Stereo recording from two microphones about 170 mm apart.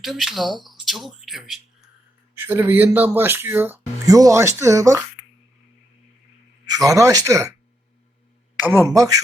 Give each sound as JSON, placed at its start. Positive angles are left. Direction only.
{"t": 0.0, "sound": "speech", "side_deg": 0}
{"t": 6.7, "sound": "speech", "side_deg": -20}
{"t": 8.5, "sound": "speech", "side_deg": -10}